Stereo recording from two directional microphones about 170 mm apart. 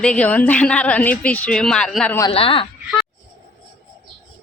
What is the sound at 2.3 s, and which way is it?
Speech, 30° left (ahead or behind).